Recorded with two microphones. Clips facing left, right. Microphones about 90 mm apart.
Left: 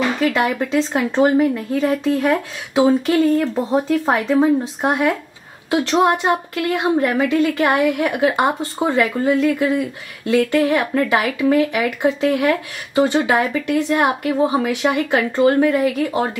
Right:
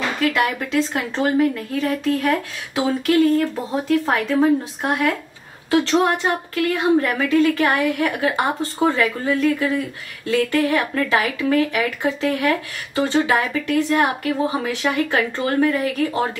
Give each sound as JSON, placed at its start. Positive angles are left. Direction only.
{"t": 0.2, "sound": "a woman's voice", "side_deg": 25}